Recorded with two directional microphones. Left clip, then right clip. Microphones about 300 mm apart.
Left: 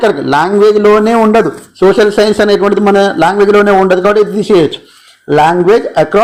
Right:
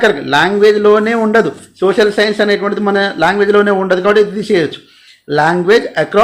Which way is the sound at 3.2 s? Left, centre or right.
Centre.